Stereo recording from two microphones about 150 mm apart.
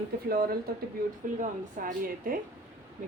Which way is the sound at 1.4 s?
65° right (ahead or behind).